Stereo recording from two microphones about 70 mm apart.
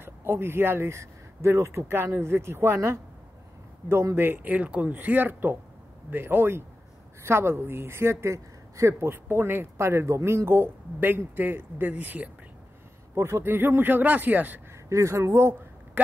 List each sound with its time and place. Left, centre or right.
0.0 s a man's voice: right
13.1 s speech: right
14.7 s speech: right